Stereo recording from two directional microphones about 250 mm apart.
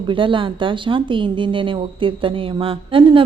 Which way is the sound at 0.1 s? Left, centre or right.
Centre.